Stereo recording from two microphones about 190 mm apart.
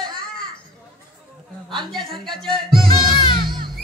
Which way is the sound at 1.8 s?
Centre (ahead or behind).